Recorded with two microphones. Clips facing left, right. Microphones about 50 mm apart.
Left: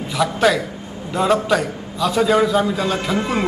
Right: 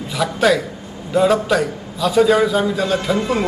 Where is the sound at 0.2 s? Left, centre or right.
Centre.